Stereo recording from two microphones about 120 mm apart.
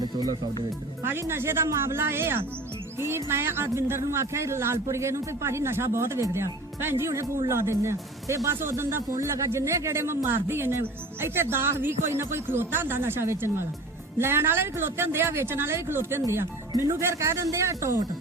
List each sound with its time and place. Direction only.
0.0 s music: 35° right (ahead or behind)
1.0 s speech: 20° right (ahead or behind)